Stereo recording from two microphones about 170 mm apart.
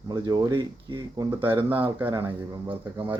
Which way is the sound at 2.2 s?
30° right (ahead or behind).